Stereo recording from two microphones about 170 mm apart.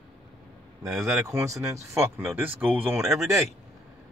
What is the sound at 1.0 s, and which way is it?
Speech, 20° right (ahead or behind).